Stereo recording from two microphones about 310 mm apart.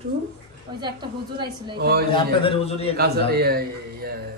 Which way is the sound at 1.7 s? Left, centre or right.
Right.